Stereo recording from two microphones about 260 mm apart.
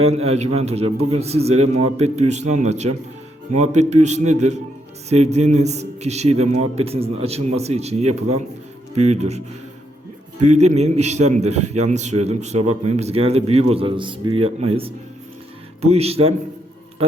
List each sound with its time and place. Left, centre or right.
0.0 s a man's voice: right
10.4 s a man's voice: right